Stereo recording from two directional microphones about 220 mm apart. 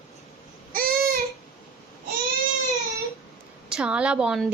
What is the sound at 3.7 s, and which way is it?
Speech, 5° right (ahead or behind).